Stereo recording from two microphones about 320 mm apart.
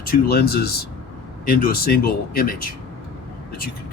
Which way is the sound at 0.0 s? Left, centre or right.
Left.